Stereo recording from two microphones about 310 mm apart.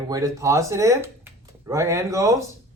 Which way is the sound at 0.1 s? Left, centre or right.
Centre.